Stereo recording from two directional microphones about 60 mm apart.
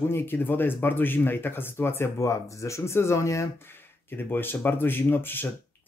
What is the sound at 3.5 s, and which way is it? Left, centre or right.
Speech, left.